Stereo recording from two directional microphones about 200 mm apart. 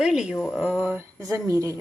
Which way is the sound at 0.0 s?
5° right (ahead or behind).